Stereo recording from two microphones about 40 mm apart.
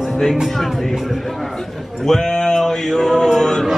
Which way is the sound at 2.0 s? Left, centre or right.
Centre.